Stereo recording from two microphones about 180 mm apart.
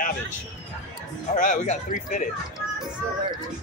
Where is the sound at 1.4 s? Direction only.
45° left (ahead or behind).